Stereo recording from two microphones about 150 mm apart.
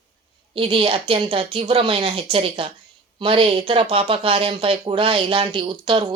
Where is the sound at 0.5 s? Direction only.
35° right (ahead or behind).